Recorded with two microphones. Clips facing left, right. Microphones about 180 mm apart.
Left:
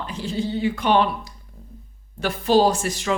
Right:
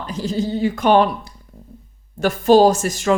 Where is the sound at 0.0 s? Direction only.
40° right (ahead or behind).